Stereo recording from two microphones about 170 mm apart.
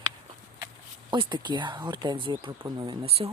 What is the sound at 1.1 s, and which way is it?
Speech, 25° right (ahead or behind).